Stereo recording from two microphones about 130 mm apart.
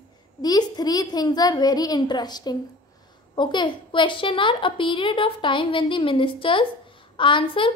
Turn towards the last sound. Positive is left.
turn(degrees=40)  # may be behind; listen again after turning